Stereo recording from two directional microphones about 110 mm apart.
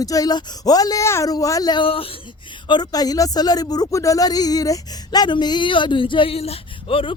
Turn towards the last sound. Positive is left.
turn(degrees=55)  # may be behind; listen again after turning